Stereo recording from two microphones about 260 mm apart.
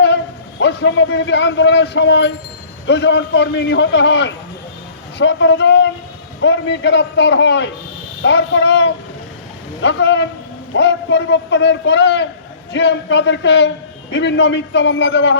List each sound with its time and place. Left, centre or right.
0.6 s a man's voice: left